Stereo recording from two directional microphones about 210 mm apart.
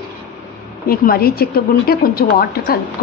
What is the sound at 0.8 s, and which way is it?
A woman's voice, 45° left (ahead or behind).